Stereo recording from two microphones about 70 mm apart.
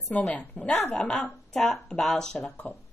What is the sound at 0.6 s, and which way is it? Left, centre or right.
Speech, centre.